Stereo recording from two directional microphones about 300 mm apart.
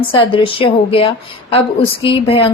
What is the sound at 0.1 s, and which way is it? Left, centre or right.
A woman's voice, centre.